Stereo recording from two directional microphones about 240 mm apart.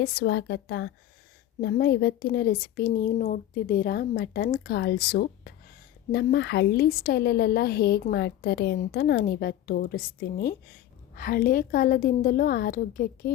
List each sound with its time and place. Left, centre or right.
0.0 s a woman's voice: left